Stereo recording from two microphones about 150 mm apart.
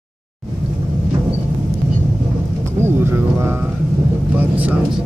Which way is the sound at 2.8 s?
15° right (ahead or behind).